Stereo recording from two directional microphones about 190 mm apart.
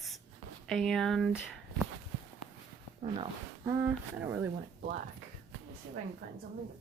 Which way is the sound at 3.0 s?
30° right (ahead or behind).